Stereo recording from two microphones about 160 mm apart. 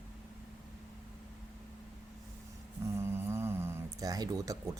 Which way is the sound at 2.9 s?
15° right (ahead or behind).